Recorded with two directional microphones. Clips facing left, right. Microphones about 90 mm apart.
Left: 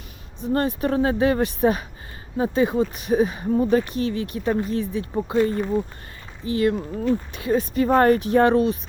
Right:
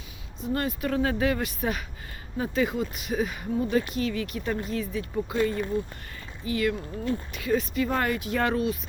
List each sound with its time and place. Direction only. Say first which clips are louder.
0.5 s speech: left 6 dB; 35° left (ahead or behind)
8.4 s speech: left 6 dB; 30° left (ahead or behind)